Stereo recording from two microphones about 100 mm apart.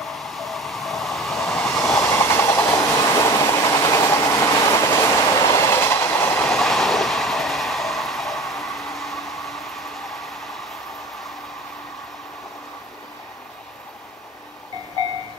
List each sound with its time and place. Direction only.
0.0 s train: centre (ahead or behind)
1.7 s train: 25° left (ahead or behind)
6.5 s train: 5° left (ahead or behind)